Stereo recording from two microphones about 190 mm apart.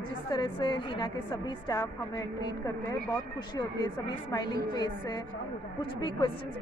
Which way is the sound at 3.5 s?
25° left (ahead or behind).